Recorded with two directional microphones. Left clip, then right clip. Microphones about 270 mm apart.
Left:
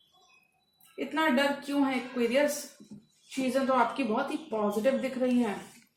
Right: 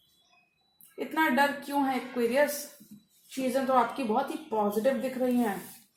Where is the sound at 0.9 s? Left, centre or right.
Right.